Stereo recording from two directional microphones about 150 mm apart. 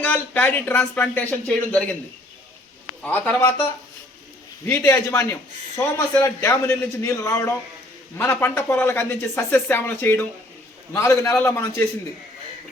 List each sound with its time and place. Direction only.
0.0 s a man's voice: 15° left (ahead or behind)
3.0 s a man's voice: 10° left (ahead or behind)